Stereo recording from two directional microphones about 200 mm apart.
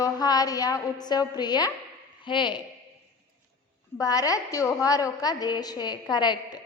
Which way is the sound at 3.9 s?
15° left (ahead or behind).